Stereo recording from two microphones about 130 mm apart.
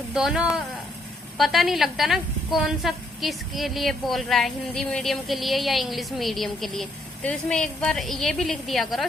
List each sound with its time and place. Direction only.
0.1 s a woman's voice: 5° right (ahead or behind)